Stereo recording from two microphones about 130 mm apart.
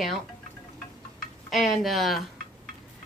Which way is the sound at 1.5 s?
Centre (ahead or behind).